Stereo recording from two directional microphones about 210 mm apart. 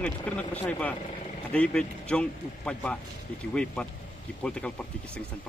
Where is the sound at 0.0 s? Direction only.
5° left (ahead or behind).